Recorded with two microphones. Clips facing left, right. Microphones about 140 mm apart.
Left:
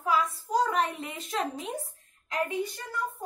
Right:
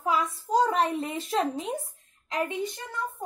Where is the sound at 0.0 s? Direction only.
25° right (ahead or behind).